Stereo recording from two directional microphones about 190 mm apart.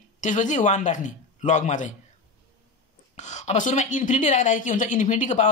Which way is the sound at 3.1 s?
35° left (ahead or behind).